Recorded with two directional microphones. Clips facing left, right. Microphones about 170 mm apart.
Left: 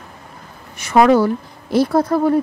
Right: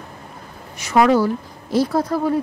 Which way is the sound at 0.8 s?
55° left (ahead or behind).